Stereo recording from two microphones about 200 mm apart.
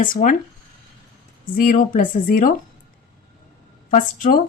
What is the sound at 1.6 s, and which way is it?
Speech, 40° left (ahead or behind).